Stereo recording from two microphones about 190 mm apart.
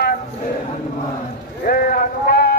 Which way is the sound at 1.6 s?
50° left (ahead or behind).